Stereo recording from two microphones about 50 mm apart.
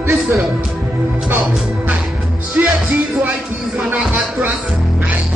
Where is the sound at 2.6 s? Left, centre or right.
Right.